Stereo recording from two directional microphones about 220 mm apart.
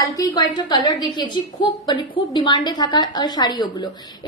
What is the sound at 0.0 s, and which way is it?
A woman's voice, 15° left (ahead or behind).